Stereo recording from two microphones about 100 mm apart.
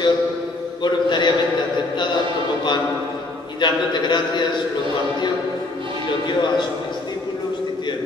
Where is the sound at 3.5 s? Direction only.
50° left (ahead or behind).